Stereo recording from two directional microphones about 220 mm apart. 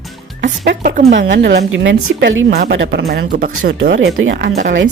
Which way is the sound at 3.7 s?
60° right (ahead or behind).